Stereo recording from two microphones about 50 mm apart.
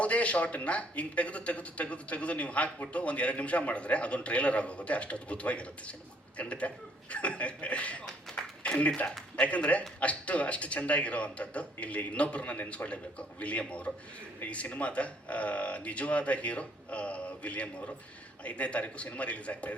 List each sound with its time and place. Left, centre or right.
0.0 s a man's voice: left
8.4 s a sound: centre
9.3 s a man's voice: left